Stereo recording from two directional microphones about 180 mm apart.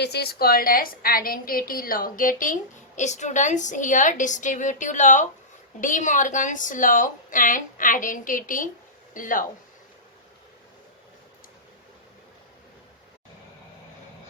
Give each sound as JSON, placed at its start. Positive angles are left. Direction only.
{"t": 0.0, "sound": "a woman's voice", "side_deg": 65}